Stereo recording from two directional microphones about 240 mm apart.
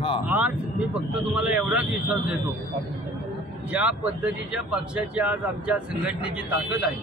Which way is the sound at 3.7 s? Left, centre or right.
Centre.